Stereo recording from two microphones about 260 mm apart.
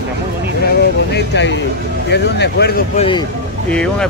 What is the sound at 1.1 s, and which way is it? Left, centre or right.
Speech, left.